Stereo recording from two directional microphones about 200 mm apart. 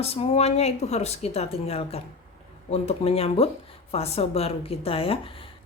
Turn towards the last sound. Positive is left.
turn(degrees=30)  # may be behind; listen again after turning